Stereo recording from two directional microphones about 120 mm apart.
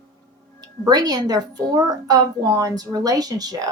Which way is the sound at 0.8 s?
35° right (ahead or behind).